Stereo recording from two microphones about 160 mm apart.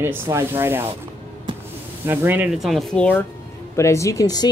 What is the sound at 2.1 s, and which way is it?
Speech, 10° right (ahead or behind).